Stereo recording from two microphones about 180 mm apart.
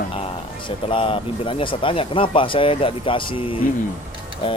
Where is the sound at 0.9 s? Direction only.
30° left (ahead or behind).